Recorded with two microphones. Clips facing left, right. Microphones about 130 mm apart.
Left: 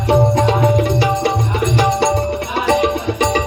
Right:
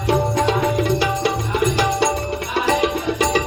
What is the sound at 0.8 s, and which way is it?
Tabla, 25° left (ahead or behind).